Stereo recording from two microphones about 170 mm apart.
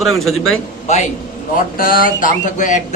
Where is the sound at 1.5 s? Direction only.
60° left (ahead or behind).